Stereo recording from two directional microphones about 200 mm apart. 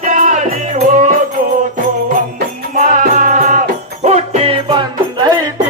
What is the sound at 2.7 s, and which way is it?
Music, 40° right (ahead or behind).